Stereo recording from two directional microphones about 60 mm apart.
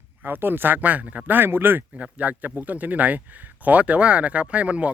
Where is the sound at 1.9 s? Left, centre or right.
Right.